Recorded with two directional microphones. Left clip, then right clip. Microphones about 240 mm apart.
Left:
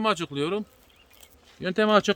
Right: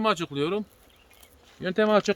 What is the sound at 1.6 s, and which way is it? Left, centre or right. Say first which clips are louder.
Speech: left 1 dB; centre.